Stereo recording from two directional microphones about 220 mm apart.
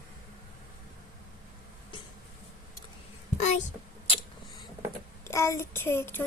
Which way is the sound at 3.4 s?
35° left (ahead or behind).